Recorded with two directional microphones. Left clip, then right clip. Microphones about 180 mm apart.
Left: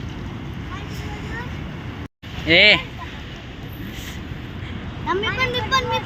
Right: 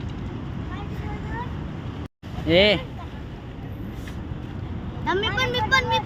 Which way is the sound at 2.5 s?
15° right (ahead or behind).